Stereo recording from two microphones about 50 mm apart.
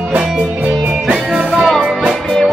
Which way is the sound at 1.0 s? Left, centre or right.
Centre.